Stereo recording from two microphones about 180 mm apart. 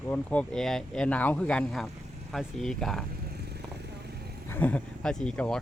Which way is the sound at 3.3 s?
65° right (ahead or behind).